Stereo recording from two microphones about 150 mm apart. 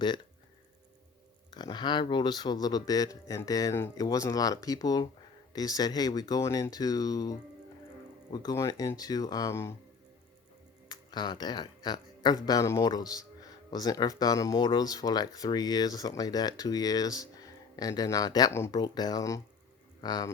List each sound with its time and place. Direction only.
1.5 s speech: 30° left (ahead or behind)
10.8 s speech: 30° left (ahead or behind)